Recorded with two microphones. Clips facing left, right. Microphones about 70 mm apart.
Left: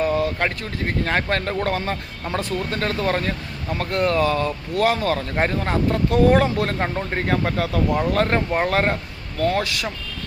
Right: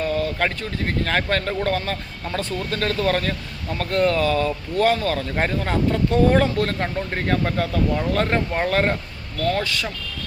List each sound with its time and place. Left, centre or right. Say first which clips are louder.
0.0 s speech: left 2 dB; centre
2.7 s speech: right 2 dB; centre